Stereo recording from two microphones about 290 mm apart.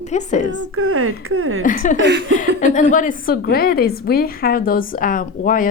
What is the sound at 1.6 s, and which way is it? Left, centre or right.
Speech, left.